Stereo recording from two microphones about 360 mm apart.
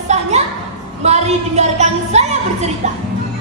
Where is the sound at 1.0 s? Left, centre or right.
Centre.